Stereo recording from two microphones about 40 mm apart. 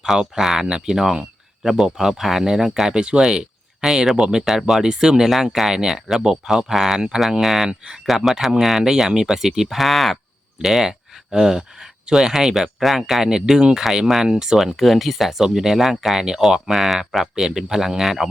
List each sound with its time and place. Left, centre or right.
0.0 s speech: centre
2.9 s speech: right
5.3 s speech: centre
8.8 s speech: centre
13.2 s speech: centre
14.8 s speech: centre
15.4 s speech: centre